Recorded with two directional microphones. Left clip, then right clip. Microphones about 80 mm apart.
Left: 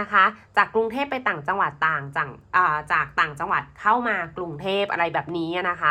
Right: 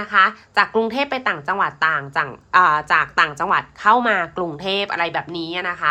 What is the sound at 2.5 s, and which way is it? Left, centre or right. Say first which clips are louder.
Speech: right 6 dB; right.